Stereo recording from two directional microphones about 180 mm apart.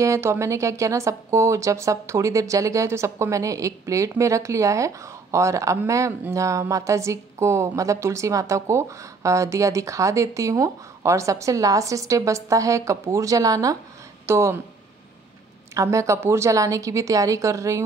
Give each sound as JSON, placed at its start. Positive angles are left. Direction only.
{"t": 0.0, "sound": "speech", "side_deg": -15}
{"t": 15.7, "sound": "speech", "side_deg": -15}